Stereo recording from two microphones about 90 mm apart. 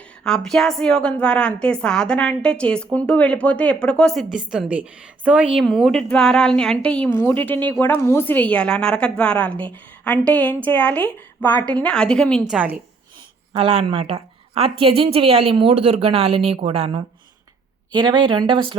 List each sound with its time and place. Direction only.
0.3 s a woman's voice: 5° left (ahead or behind)
4.5 s a woman's voice: 15° right (ahead or behind)
5.6 s a woman's voice: 5° left (ahead or behind)
12.5 s a woman's voice: 15° right (ahead or behind)
13.5 s speech: 90° right
17.9 s speech: 60° right (ahead or behind)